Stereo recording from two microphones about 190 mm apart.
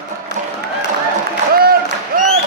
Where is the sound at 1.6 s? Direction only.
55° right (ahead or behind).